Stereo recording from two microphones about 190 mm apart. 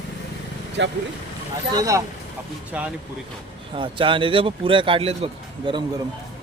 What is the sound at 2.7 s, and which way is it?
Speech, 10° right (ahead or behind).